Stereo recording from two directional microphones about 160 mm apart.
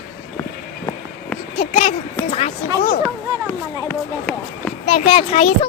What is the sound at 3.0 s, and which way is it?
Speech, 10° left (ahead or behind).